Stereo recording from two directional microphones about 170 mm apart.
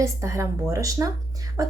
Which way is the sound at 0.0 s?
15° right (ahead or behind).